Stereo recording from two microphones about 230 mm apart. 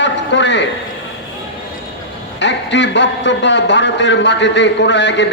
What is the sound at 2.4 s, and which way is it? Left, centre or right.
Speech, left.